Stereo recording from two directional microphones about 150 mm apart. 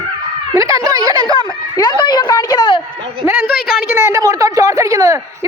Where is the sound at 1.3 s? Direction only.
30° left (ahead or behind).